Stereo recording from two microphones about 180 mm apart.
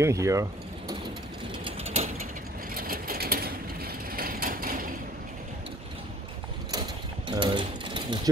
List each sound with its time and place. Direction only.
0.0 s speech: 15° right (ahead or behind)
1.6 s ratchet: 35° right (ahead or behind)
2.7 s mechanisms: 55° right (ahead or behind)
7.2 s mechanisms: 25° right (ahead or behind)